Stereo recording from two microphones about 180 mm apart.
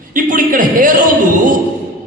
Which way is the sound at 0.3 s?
50° right (ahead or behind).